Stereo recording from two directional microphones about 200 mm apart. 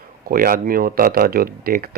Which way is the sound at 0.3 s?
45° right (ahead or behind).